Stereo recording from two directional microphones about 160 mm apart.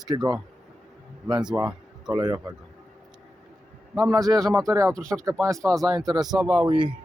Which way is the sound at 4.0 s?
20° right (ahead or behind).